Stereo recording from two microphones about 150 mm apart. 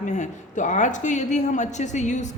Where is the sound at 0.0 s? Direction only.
55° left (ahead or behind).